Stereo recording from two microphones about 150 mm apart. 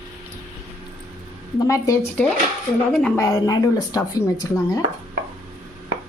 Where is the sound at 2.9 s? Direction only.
5° left (ahead or behind).